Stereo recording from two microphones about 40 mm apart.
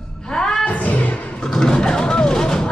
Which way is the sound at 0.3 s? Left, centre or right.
Centre.